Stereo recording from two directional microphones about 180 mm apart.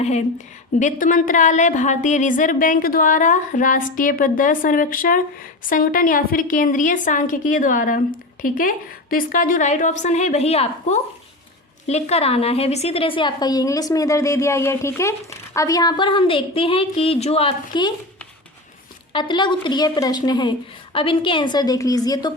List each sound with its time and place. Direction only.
0.0 s a woman's voice: 40° left (ahead or behind); by 17.9 s 25° left (ahead or behind)
19.1 s a woman's voice: 25° left (ahead or behind)